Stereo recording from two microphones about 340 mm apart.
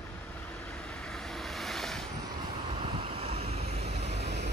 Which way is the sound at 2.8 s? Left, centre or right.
Centre.